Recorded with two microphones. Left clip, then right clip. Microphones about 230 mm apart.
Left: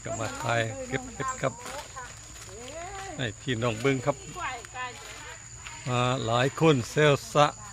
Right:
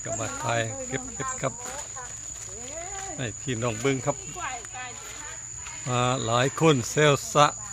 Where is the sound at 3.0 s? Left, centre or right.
Centre.